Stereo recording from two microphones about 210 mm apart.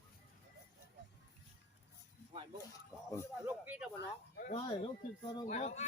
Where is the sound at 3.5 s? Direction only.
5° right (ahead or behind).